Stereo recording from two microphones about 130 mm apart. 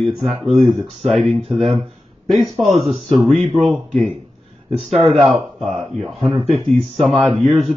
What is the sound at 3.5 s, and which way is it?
Speech, 45° right (ahead or behind).